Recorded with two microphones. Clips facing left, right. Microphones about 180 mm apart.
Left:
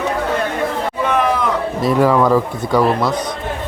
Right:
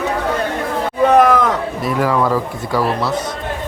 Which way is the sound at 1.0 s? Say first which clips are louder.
Right 7 dB; 45° right (ahead or behind).